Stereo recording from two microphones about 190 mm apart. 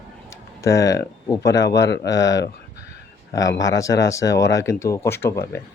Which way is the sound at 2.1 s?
70° left (ahead or behind).